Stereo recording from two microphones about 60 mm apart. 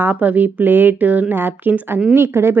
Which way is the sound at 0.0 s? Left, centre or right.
Right.